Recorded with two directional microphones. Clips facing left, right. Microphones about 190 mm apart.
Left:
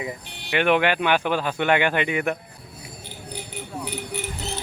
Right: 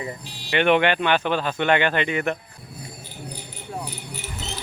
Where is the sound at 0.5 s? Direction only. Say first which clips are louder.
Right 1 dB; 5° left (ahead or behind).